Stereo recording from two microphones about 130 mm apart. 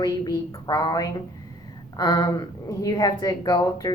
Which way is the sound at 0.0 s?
30° left (ahead or behind).